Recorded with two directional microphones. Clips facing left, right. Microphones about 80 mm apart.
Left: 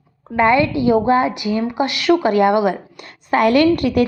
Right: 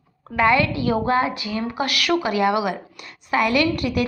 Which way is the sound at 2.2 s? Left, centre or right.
Left.